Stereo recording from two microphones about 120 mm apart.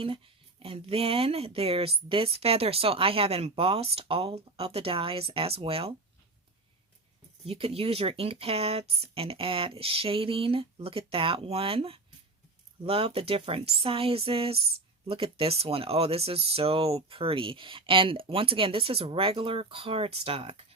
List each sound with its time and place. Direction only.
0.6 s speech: 50° right (ahead or behind)
7.4 s speech: 55° right (ahead or behind)